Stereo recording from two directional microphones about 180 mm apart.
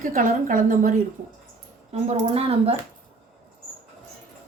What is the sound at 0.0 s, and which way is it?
Speech, 50° right (ahead or behind).